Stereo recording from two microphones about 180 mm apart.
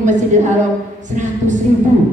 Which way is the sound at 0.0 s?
45° right (ahead or behind).